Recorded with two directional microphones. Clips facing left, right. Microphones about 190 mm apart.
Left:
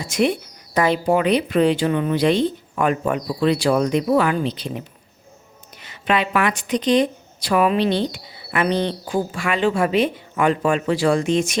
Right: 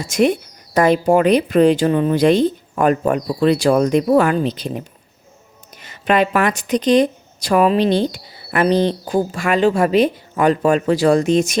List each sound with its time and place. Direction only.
0.0 s speech: 45° right (ahead or behind)